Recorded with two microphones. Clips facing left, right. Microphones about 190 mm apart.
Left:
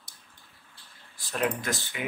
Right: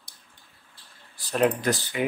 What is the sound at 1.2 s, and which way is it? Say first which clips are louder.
Speech: right 6 dB; 35° right (ahead or behind).